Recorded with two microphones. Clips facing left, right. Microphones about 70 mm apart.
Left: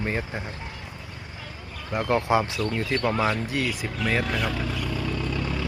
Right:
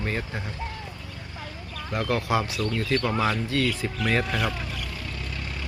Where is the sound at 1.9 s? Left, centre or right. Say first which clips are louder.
Left 3 dB; left.